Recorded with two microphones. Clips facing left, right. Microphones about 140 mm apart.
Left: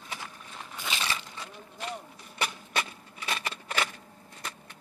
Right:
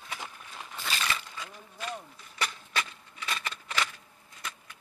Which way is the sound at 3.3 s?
35° left (ahead or behind).